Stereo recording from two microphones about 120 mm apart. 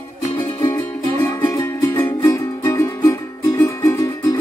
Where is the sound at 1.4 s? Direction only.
30° left (ahead or behind).